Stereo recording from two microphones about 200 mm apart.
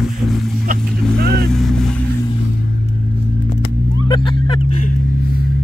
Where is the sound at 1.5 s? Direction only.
Centre (ahead or behind).